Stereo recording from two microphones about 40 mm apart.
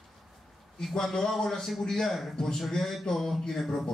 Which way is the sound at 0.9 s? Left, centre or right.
Centre.